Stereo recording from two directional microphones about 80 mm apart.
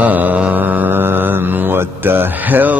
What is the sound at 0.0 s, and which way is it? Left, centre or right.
Mantra, centre.